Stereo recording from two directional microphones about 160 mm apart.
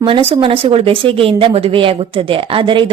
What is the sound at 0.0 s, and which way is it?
A woman's voice, 35° right (ahead or behind).